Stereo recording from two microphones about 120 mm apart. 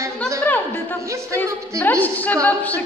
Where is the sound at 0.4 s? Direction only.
15° left (ahead or behind).